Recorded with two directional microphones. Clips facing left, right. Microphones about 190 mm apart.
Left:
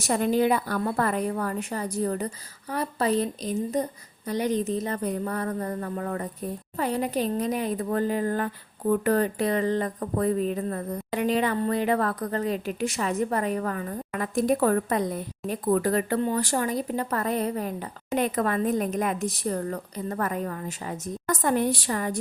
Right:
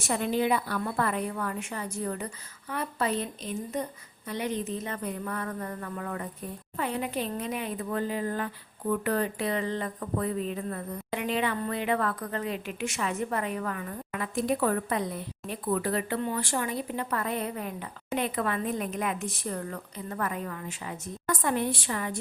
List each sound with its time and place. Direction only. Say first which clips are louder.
0.0 s a woman's voice: left 5 dB; 40° left (ahead or behind)